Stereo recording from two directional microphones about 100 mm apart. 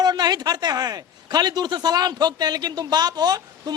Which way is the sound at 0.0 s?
45° right (ahead or behind).